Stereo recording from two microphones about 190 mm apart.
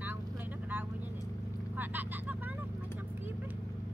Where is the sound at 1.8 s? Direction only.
10° right (ahead or behind).